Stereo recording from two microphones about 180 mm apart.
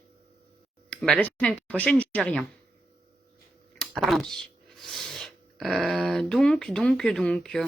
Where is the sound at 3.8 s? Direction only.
Centre (ahead or behind).